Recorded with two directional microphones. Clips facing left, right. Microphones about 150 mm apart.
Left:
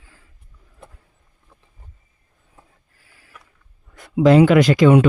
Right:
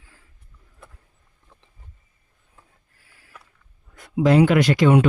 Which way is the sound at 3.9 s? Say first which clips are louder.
Left 4 dB; 90° left.